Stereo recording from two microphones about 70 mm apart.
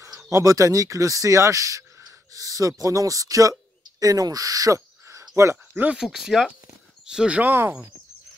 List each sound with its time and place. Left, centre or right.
0.2 s speech: right
5.3 s speech: right
5.9 s speech: centre
7.1 s speech: centre